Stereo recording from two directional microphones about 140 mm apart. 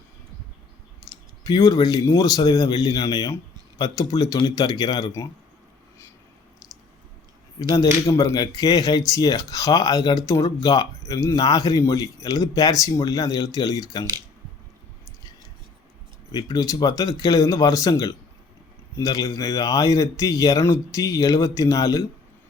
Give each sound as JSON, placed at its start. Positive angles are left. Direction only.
{"t": 1.1, "sound": "clicking", "side_deg": 25}
{"t": 1.5, "sound": "speech", "side_deg": 30}
{"t": 7.6, "sound": "speech", "side_deg": 25}
{"t": 16.3, "sound": "speech", "side_deg": 25}